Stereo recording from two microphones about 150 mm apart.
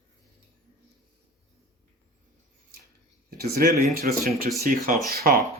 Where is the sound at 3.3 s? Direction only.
90° right.